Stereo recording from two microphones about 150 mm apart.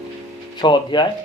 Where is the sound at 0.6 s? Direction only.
30° left (ahead or behind).